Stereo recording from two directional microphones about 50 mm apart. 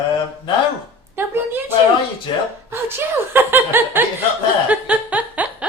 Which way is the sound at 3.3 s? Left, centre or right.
Right.